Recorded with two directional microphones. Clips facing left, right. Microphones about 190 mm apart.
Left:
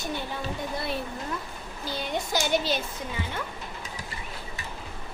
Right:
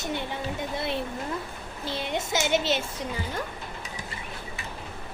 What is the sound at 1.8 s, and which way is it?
Speech, 25° right (ahead or behind).